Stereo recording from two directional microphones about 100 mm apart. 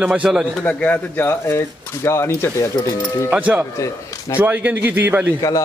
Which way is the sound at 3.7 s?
30° left (ahead or behind).